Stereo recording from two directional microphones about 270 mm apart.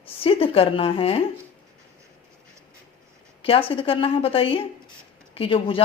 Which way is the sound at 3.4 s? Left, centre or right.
Left.